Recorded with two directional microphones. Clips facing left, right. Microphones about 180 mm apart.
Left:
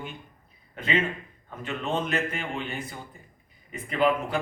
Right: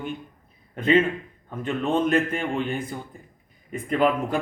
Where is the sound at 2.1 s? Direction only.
50° right (ahead or behind).